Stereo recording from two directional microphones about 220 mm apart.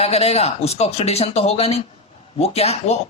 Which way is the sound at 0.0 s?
30° left (ahead or behind).